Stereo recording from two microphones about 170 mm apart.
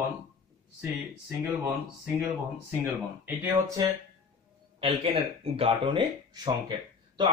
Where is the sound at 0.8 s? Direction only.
20° right (ahead or behind).